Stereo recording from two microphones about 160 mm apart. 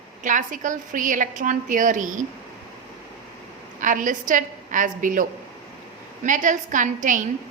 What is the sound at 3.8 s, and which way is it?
A woman's voice, 55° right (ahead or behind).